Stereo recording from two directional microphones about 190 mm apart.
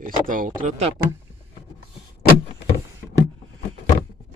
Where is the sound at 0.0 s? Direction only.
45° right (ahead or behind).